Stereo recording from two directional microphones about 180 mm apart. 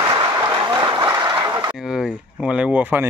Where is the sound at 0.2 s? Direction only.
25° right (ahead or behind).